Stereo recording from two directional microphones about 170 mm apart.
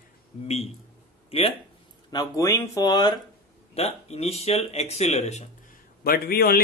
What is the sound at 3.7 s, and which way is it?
Speech, 35° left (ahead or behind).